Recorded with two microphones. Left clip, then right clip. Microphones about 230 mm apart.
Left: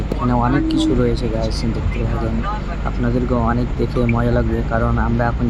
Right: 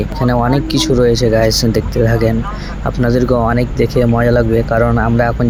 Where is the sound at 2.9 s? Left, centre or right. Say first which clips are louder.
Right 8 dB; right.